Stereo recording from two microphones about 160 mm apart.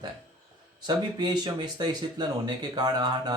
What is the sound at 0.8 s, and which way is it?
Speech, 25° right (ahead or behind).